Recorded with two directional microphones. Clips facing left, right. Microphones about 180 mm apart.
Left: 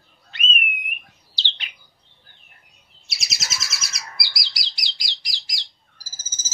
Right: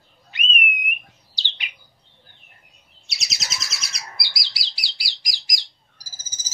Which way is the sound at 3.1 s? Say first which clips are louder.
Even; centre (ahead or behind).